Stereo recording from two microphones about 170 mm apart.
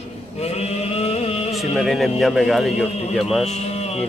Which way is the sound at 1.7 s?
Centre (ahead or behind).